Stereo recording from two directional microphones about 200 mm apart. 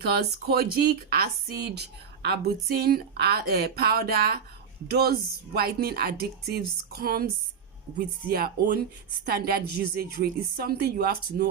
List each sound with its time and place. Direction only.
0.0 s speech: 50° right (ahead or behind)